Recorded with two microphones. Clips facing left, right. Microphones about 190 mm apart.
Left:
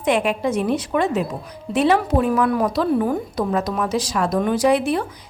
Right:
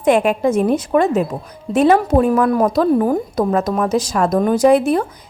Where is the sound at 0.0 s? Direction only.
50° right (ahead or behind).